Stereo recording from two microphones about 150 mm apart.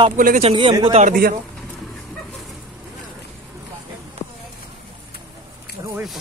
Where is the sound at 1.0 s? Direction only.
70° right (ahead or behind).